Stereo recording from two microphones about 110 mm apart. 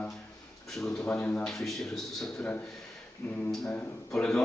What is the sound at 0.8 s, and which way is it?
Speech, 5° left (ahead or behind).